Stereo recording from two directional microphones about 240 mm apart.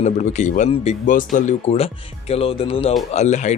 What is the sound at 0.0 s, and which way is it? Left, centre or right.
Speech, left.